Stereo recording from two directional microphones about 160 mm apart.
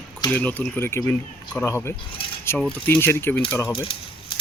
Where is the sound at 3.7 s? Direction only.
35° left (ahead or behind).